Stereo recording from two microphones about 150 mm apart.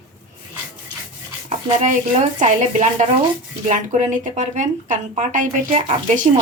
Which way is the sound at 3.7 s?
55° right (ahead or behind).